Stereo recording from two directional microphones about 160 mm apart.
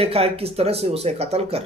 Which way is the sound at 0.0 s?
40° right (ahead or behind).